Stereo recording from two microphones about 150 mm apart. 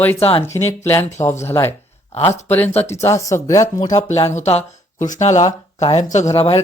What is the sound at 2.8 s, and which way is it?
Speech, 15° left (ahead or behind).